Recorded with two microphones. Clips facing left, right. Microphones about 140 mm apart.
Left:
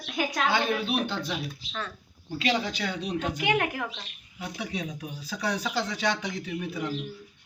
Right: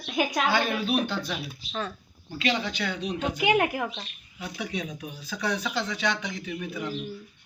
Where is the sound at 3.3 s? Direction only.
10° right (ahead or behind).